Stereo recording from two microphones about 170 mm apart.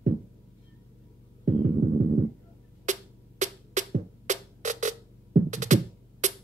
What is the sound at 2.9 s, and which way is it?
Music, 45° right (ahead or behind).